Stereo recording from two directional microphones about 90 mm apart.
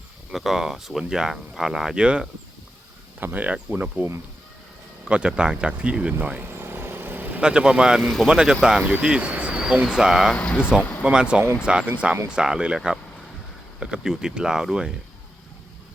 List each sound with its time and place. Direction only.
0.3 s speech: 5° right (ahead or behind)
5.0 s speech: 10° right (ahead or behind)
6.4 s vehicle: 25° right (ahead or behind)
7.4 s speech: 10° right (ahead or behind)
10.3 s speech: 15° left (ahead or behind)
11.0 s speech: 10° right (ahead or behind)